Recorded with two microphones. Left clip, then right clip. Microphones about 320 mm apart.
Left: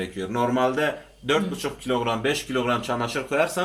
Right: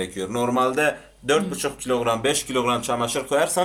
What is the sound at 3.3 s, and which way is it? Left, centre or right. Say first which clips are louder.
Speech: right 2 dB; right.